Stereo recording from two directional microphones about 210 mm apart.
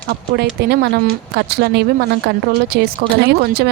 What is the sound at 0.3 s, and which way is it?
Speech, 50° right (ahead or behind).